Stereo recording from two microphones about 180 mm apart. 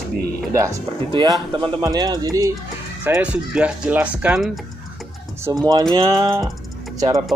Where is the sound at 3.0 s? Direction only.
10° right (ahead or behind).